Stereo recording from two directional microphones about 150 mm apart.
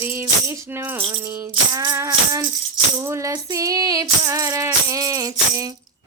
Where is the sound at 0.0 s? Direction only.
15° right (ahead or behind).